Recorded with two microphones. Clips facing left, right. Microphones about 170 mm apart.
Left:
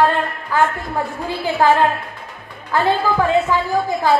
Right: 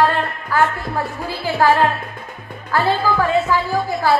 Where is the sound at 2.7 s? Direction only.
20° left (ahead or behind).